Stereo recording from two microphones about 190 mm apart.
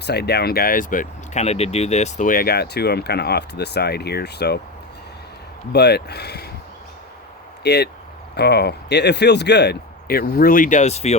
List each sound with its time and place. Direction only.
0.0 s speech: 60° left (ahead or behind)
5.7 s speech: 60° left (ahead or behind)
7.6 s speech: 60° left (ahead or behind); by 11.2 s 35° left (ahead or behind)